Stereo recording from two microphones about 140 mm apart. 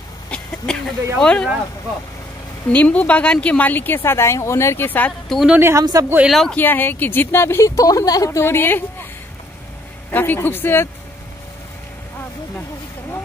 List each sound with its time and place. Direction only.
0.3 s a sound: 5° left (ahead or behind)
1.1 s speech: 5° left (ahead or behind)
2.7 s speech: 10° left (ahead or behind)
5.3 s speech: centre (ahead or behind)
5.6 s speech: 20° right (ahead or behind)
6.1 s speech: centre (ahead or behind)
6.5 s speech: 15° left (ahead or behind)
10.1 s speech: 15° left (ahead or behind)